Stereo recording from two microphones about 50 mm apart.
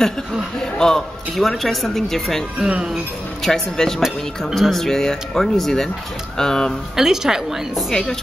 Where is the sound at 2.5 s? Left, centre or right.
Centre.